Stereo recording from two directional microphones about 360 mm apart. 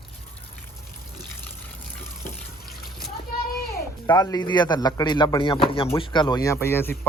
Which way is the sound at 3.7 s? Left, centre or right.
Centre.